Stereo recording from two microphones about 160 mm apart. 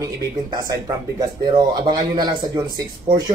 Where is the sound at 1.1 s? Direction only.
25° right (ahead or behind).